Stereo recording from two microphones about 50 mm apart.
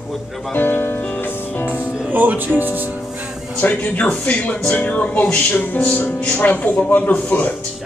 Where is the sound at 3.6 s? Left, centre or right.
Left.